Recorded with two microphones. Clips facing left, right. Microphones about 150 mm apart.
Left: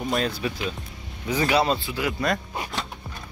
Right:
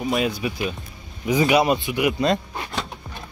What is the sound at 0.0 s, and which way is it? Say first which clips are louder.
Speech: right 3 dB; 10° right (ahead or behind).